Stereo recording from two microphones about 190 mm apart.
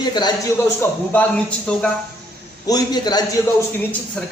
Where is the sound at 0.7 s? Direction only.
10° left (ahead or behind).